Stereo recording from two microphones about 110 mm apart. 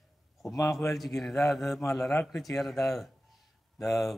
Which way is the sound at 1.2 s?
Centre (ahead or behind).